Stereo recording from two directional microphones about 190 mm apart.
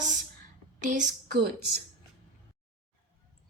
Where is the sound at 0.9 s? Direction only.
45° right (ahead or behind).